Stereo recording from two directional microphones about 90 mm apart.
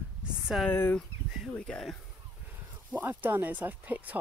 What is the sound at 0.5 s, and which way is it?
Speech, 5° right (ahead or behind).